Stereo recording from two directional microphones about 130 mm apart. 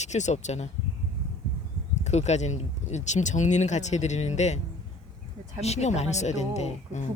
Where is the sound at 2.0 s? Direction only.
60° left (ahead or behind).